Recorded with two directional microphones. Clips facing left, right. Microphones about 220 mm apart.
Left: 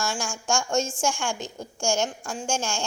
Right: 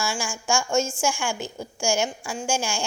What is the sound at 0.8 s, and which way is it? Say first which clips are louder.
Speech: right 2 dB; 30° left (ahead or behind).